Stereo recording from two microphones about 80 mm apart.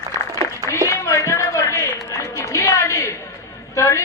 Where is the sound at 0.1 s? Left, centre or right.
Left.